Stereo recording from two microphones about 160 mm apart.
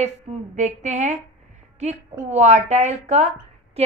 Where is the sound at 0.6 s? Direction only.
45° right (ahead or behind).